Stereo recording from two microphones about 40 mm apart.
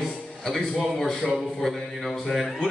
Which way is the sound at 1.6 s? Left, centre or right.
Centre.